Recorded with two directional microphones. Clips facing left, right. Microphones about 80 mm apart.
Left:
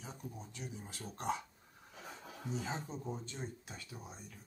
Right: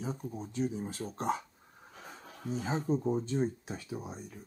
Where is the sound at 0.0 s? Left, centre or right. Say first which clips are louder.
Right 10 dB; right.